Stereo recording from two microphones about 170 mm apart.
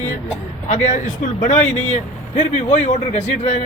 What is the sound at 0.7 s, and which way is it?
A man's voice, 45° left (ahead or behind).